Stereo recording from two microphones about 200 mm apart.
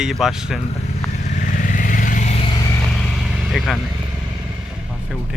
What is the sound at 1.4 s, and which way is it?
Vehicle, 40° left (ahead or behind).